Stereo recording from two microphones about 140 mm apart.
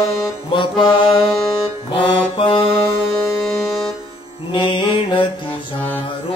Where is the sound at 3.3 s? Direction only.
Centre (ahead or behind).